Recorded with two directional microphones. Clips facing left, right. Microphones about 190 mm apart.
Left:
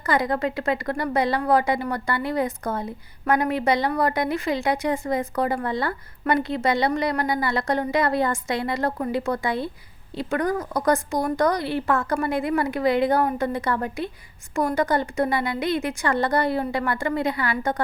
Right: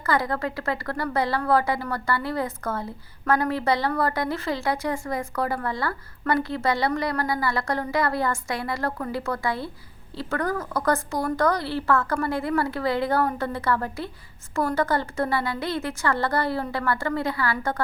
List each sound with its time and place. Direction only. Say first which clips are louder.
0.0 s a woman's voice: left 2 dB; 20° left (ahead or behind)